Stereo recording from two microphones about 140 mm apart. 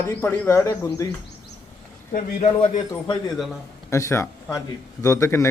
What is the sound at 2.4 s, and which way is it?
Speech, 50° left (ahead or behind).